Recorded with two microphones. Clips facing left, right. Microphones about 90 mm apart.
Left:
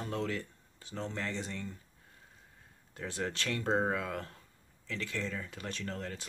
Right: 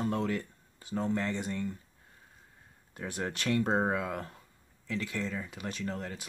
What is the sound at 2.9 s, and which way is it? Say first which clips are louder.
Speech: right 1 dB; 15° right (ahead or behind).